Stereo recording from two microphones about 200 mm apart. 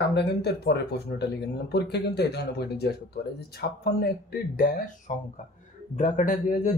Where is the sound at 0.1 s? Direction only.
55° left (ahead or behind).